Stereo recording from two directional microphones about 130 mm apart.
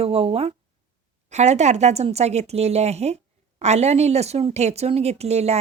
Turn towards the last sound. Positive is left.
turn(degrees=-55)  # may be behind; listen again after turning